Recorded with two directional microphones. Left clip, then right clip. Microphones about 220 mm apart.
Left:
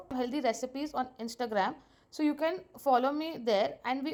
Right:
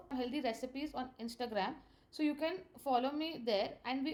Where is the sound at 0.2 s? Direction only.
30° left (ahead or behind).